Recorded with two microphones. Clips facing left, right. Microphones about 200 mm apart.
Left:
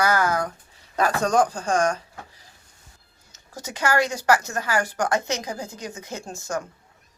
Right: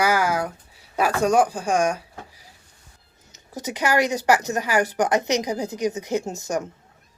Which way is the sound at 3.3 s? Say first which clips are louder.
Right 6 dB; 15° right (ahead or behind).